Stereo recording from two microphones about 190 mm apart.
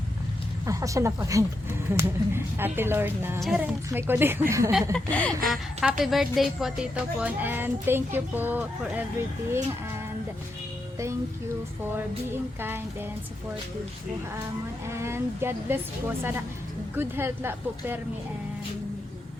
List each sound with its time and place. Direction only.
0.6 s a woman's voice: 15° right (ahead or behind)
4.9 s a woman's voice: 5° left (ahead or behind); by 9.0 s 10° right (ahead or behind)
12.5 s a woman's voice: 10° right (ahead or behind)
14.8 s a woman's voice: 15° right (ahead or behind)